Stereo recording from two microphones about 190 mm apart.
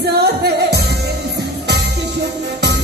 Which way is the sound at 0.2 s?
60° right (ahead or behind).